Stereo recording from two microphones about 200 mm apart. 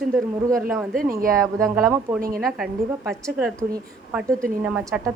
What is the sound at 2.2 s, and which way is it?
Speech, 45° right (ahead or behind).